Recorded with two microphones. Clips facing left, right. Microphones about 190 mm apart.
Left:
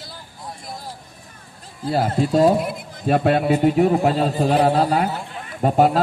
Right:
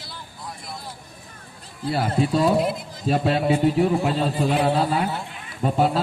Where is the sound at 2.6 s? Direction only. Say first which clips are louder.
Left 2 dB; 55° left (ahead or behind).